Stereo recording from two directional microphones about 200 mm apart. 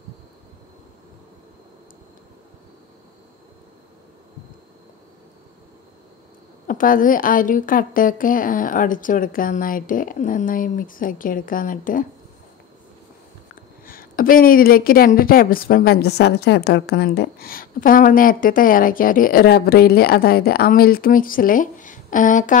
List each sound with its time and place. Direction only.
6.7 s speech: 45° left (ahead or behind)
13.8 s speech: 45° left (ahead or behind)